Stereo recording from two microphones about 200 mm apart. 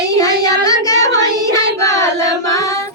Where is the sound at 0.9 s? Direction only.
15° left (ahead or behind).